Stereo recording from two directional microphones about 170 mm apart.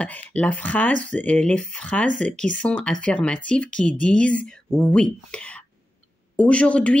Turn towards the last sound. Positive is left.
turn(degrees=5)  # may be behind; listen again after turning